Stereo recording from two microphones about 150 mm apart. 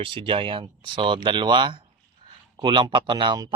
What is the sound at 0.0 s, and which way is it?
Speech, 35° right (ahead or behind).